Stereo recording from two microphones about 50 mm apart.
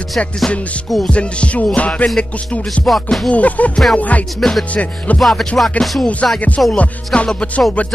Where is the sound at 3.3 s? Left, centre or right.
Left.